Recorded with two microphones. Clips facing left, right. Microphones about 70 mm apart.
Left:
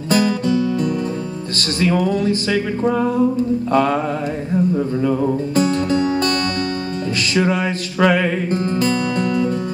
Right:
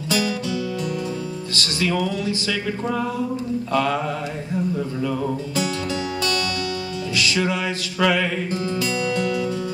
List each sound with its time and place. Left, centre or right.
0.1 s music: left
5.6 s music: left